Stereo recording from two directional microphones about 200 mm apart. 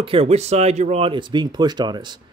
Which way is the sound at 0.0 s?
30° right (ahead or behind).